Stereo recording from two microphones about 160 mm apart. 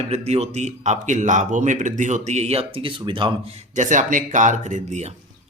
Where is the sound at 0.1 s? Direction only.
40° right (ahead or behind).